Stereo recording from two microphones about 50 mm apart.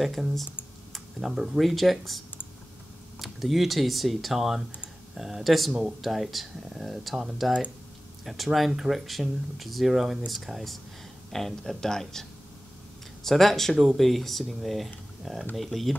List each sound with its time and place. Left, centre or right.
0.0 s speech: centre
1.2 s speech: centre
5.7 s speech: centre
5.9 s speech: centre
8.5 s speech: centre